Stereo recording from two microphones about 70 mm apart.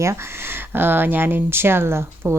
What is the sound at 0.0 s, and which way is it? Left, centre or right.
Speech, right.